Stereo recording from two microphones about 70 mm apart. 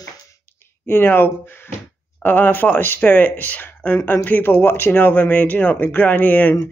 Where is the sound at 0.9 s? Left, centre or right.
Left.